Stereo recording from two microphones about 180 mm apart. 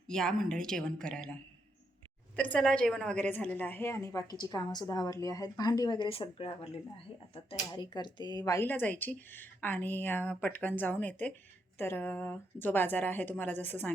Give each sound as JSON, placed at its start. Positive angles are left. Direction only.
{"t": 0.1, "sound": "a woman's voice", "side_deg": 5}